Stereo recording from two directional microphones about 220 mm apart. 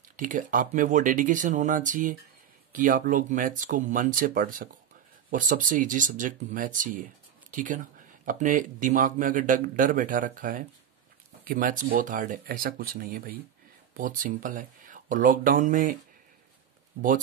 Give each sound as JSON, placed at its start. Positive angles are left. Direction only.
{"t": 0.1, "sound": "a man's voice", "side_deg": -35}